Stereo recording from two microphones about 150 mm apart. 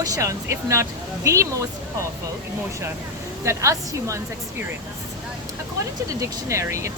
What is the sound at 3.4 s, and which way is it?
Speech, 20° right (ahead or behind).